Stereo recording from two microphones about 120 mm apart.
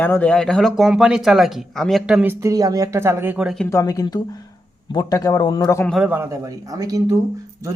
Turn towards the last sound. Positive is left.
turn(degrees=-30)  # may be behind; listen again after turning